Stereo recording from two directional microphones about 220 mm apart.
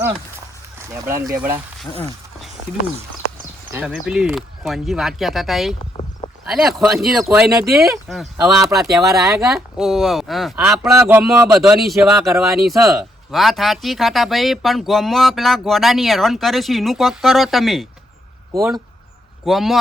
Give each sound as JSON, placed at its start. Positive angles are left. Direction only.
{"t": 0.8, "sound": "speech", "side_deg": -15}
{"t": 1.8, "sound": "speech", "side_deg": 0}
{"t": 5.8, "sound": "a sound", "side_deg": 25}
{"t": 6.4, "sound": "speech", "side_deg": 0}
{"t": 9.0, "sound": "speech", "side_deg": -15}
{"t": 9.4, "sound": "speech", "side_deg": 0}
{"t": 18.5, "sound": "speech", "side_deg": -15}
{"t": 19.5, "sound": "speech", "side_deg": 0}